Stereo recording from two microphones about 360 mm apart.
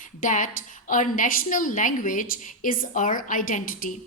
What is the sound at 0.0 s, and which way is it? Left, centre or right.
A woman's voice, left.